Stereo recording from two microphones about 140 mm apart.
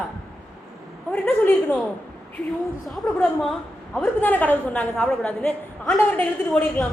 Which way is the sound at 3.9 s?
10° left (ahead or behind).